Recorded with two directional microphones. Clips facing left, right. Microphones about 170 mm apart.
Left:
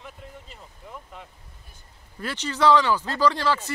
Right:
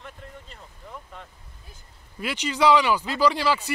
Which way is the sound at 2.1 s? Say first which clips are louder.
Right 2 dB; 15° right (ahead or behind).